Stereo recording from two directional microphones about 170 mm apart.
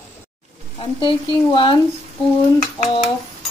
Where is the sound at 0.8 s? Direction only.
30° left (ahead or behind).